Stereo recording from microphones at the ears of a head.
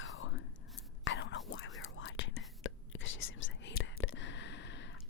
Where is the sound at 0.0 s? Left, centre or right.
Left.